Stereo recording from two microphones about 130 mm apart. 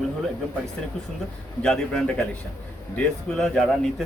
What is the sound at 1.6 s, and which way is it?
Speech, 5° left (ahead or behind).